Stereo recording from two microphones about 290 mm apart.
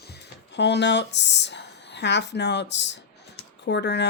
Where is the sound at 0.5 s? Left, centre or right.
Left.